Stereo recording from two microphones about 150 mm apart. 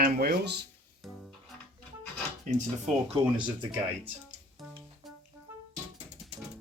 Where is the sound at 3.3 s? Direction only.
30° right (ahead or behind).